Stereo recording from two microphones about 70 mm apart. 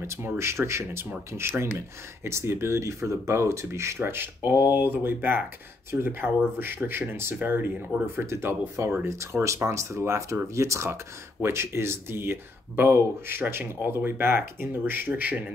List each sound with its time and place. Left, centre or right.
0.0 s speech: right
2.2 s speech: right
4.0 s speech: right